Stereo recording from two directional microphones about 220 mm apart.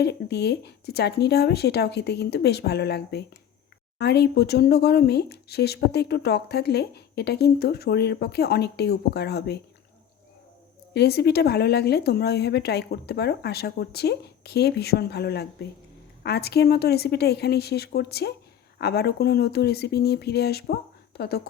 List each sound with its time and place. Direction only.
0.0 s speech: 50° left (ahead or behind)
10.9 s speech: 45° left (ahead or behind)